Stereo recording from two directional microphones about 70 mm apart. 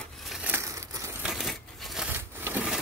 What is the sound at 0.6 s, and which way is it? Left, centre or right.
Crumpling, right.